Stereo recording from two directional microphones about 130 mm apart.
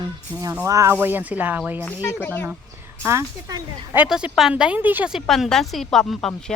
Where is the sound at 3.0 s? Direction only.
20° right (ahead or behind).